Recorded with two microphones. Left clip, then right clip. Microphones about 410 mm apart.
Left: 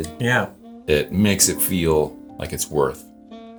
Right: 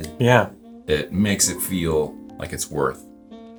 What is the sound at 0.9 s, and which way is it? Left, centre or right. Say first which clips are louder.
Speech: left 3 dB; left.